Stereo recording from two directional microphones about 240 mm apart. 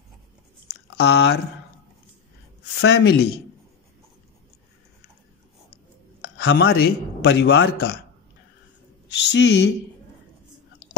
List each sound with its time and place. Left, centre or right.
0.7 s chewing: left
2.8 s a man's voice: left
6.4 s speech: left
6.7 s a man's voice: left
9.2 s a man's voice: left
10.8 s a sound: left